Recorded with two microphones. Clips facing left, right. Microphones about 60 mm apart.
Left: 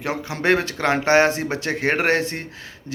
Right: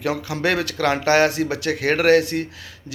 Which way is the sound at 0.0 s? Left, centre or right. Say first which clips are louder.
Right 1 dB; left.